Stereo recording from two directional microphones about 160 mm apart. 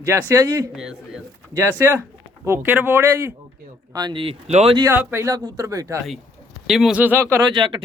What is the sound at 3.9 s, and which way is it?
Speech, 25° right (ahead or behind).